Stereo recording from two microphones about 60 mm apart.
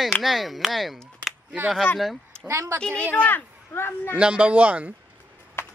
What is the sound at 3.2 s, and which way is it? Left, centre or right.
Speech, left.